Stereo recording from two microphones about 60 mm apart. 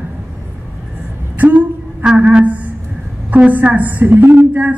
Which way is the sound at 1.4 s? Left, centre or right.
Right.